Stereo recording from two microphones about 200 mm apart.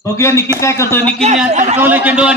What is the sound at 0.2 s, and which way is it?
Speech, 15° left (ahead or behind).